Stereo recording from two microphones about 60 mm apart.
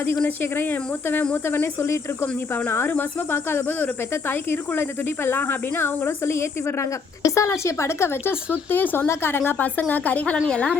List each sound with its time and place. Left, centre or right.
0.3 s speech: left
2.2 s speech: left
7.3 s speech: left
8.7 s a woman's voice: left; by 10.8 s centre